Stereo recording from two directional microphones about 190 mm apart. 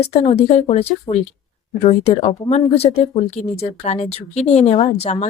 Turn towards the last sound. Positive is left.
turn(degrees=35)  # may be behind; listen again after turning